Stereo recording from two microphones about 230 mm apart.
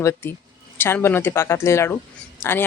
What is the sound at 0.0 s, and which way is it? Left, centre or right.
Speech, centre.